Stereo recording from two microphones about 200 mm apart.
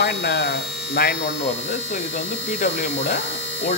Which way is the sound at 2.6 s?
40° left (ahead or behind).